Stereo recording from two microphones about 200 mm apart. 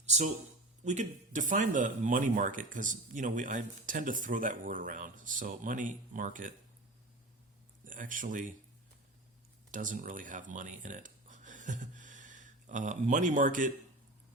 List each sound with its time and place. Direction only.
0.0 s a sound: 35° right (ahead or behind)
0.9 s speech: 40° right (ahead or behind)
7.9 s speech: 40° right (ahead or behind)
9.7 s speech: 40° right (ahead or behind)